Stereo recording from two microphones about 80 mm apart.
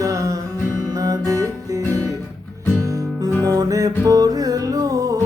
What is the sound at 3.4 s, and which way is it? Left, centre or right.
Music, right.